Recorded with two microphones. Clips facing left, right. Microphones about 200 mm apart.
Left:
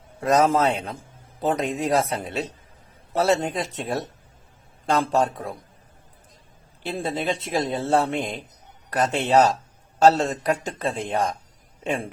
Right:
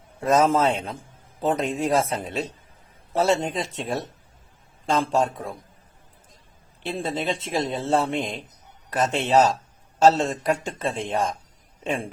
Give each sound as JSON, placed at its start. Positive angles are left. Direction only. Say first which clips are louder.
{"t": 0.2, "sound": "speech", "louder": "even", "side_deg": 0}
{"t": 6.8, "sound": "speech", "louder": "left 1 dB", "side_deg": 0}